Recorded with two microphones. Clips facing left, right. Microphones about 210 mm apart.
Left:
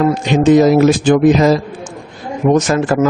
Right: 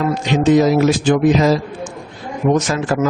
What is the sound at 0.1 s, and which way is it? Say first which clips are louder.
Speech: left 3 dB; 50° left (ahead or behind).